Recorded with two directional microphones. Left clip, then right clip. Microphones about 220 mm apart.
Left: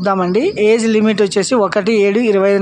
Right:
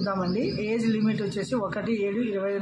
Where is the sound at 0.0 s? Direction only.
45° left (ahead or behind).